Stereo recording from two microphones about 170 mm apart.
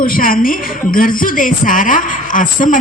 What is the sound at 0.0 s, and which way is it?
A woman's voice, 55° left (ahead or behind).